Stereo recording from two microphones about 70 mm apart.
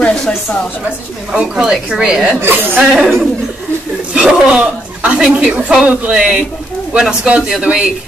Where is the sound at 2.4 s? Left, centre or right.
Right.